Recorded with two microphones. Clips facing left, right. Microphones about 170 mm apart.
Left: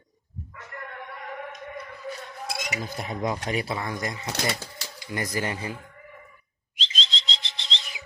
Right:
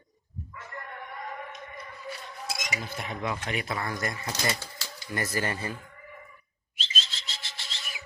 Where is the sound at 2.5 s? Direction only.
60° left (ahead or behind).